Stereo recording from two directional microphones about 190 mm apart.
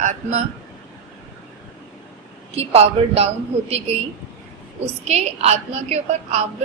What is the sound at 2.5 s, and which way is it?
Speech, 35° right (ahead or behind).